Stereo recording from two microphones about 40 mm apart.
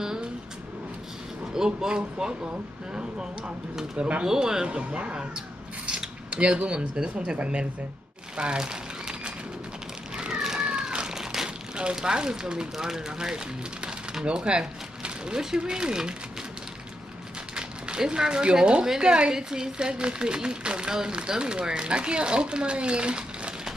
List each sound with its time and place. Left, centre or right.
1.5 s speech: centre
5.9 s mechanisms: right
6.6 s speech: right
8.4 s a sound: right
10.1 s cat: right
10.6 s speech: right
17.6 s speech: centre